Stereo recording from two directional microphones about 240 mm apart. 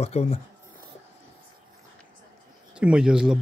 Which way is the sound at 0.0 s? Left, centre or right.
Left.